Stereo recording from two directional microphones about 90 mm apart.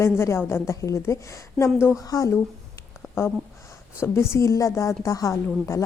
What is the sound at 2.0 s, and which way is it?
A woman's voice, 40° left (ahead or behind).